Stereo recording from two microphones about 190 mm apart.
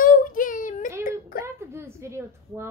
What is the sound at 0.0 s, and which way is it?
Child singing, 45° left (ahead or behind).